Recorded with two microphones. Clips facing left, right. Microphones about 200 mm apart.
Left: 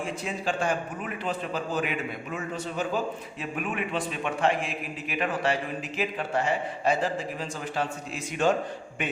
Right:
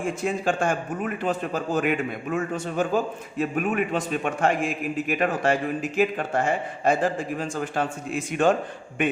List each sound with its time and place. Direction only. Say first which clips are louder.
0.0 s a man's voice: right 6 dB; 50° right (ahead or behind)